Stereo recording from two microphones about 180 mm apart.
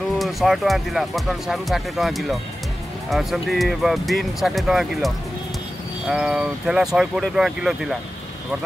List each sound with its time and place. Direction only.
0.2 s speech: centre (ahead or behind)